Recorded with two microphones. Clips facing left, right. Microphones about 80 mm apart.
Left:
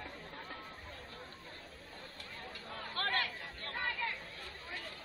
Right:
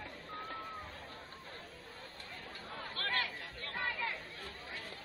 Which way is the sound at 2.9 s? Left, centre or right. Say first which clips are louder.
Left 3 dB; left.